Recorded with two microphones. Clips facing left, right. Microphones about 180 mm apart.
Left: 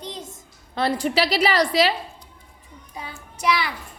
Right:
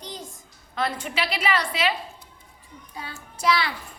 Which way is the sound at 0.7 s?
35° left (ahead or behind).